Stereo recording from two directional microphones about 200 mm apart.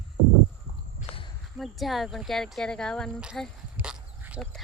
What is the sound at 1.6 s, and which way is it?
Speech, centre (ahead or behind).